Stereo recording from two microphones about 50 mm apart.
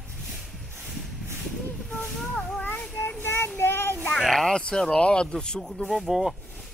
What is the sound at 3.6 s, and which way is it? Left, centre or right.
Child singing, left.